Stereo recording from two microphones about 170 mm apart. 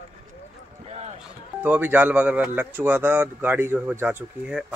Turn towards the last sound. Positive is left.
turn(degrees=-10)  # may be behind; listen again after turning